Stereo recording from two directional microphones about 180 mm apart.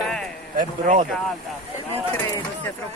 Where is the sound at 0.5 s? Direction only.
45° right (ahead or behind).